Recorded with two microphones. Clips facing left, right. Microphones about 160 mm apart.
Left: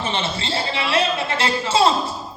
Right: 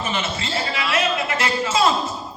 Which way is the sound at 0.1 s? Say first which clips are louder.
Left 1 dB; 30° left (ahead or behind).